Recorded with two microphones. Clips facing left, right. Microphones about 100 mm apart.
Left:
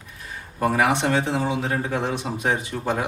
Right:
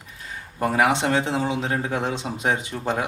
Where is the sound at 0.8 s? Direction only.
20° right (ahead or behind).